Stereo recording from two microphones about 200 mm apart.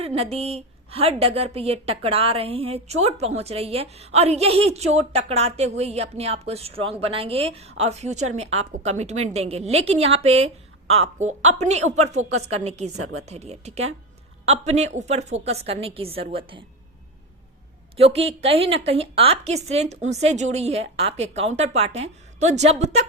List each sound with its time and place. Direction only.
0.0 s a woman's voice: 30° right (ahead or behind)
17.9 s a woman's voice: 30° right (ahead or behind)